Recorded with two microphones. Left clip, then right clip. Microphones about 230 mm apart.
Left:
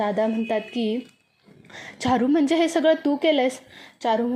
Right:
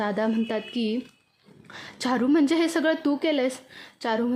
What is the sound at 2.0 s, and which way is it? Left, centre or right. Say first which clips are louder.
A woman's voice: left 2 dB; centre.